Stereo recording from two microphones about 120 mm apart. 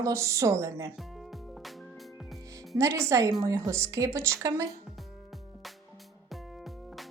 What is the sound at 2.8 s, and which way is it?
Speech, 25° right (ahead or behind).